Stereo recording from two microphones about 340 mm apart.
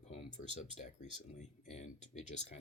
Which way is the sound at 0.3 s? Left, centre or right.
Left.